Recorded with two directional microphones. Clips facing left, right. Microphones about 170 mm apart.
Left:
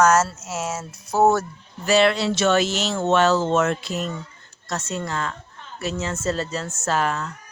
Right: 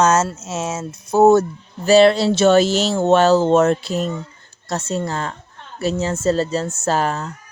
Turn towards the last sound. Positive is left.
turn(degrees=-35)  # may be behind; listen again after turning